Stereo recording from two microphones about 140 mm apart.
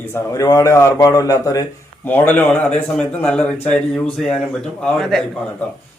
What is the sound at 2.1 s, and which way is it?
A man's voice, 15° left (ahead or behind).